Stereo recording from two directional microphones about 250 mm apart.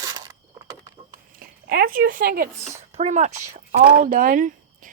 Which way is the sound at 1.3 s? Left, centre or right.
Right.